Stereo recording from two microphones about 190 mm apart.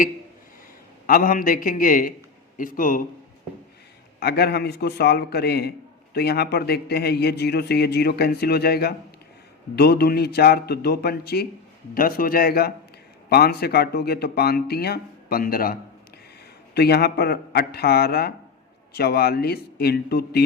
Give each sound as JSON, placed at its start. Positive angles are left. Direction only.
{"t": 1.0, "sound": "a man's voice", "side_deg": 50}
{"t": 4.2, "sound": "a man's voice", "side_deg": 55}